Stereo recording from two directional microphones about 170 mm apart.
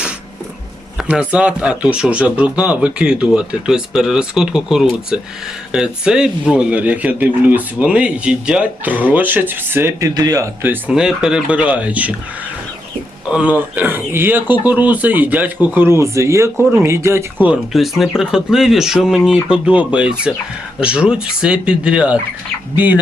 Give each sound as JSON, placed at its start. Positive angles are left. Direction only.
{"t": 0.9, "sound": "speech", "side_deg": -5}
{"t": 13.3, "sound": "speech", "side_deg": -10}
{"t": 17.4, "sound": "speech", "side_deg": -5}